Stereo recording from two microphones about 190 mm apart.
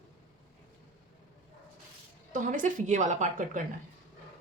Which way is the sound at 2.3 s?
45° right (ahead or behind).